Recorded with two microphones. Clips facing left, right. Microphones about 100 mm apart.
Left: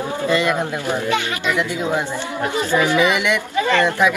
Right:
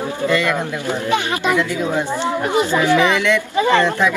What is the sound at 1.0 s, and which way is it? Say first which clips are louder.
Speech: right 2 dB; 20° right (ahead or behind).